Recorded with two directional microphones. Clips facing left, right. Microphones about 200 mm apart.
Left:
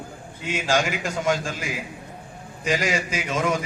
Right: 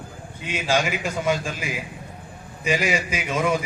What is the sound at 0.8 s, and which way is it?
A man's voice, 15° right (ahead or behind).